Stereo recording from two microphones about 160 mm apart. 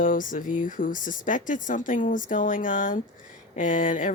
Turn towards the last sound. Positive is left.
turn(degrees=55)  # may be behind; listen again after turning